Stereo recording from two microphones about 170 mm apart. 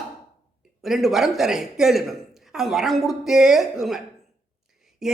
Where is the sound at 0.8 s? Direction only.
Centre (ahead or behind).